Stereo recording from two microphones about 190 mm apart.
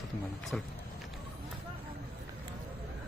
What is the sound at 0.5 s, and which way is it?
Speech, 5° left (ahead or behind).